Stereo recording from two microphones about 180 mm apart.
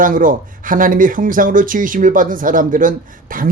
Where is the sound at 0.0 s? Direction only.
50° right (ahead or behind).